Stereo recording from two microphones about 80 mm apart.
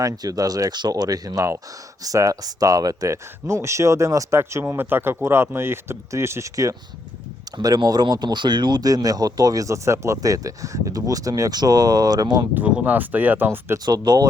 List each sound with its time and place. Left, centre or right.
0.0 s speech: right
8.0 s speech: right
8.8 s speech: right
12.5 s speech: centre
13.8 s speech: right